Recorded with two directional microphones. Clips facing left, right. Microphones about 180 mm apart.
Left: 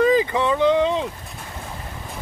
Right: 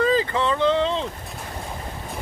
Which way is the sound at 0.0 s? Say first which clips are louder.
Left 3 dB; 15° left (ahead or behind).